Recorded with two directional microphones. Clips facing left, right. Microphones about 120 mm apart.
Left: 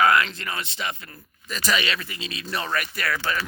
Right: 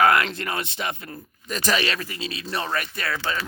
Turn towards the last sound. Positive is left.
turn(degrees=-25)  # may be behind; listen again after turning